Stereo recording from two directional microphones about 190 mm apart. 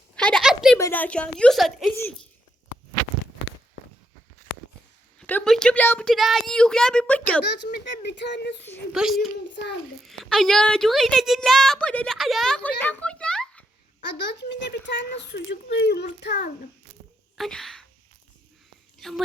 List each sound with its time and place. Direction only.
0.2 s a sound: 5° left (ahead or behind)
0.8 s a woman's voice: 10° left (ahead or behind)
4.5 s a sound: 75° left (ahead or behind)
5.2 s a woman's voice: 5° left (ahead or behind)
7.6 s speech: 65° left (ahead or behind)
8.9 s a woman's voice: centre (ahead or behind)
12.8 s a sound: 10° left (ahead or behind)
14.3 s speech: 65° left (ahead or behind)
17.3 s speech: centre (ahead or behind)
18.9 s a woman's voice: centre (ahead or behind)